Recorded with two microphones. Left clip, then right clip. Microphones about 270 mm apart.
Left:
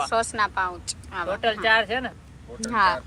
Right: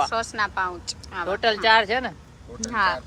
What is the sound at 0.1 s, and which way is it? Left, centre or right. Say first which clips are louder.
Speech: left 2 dB; centre.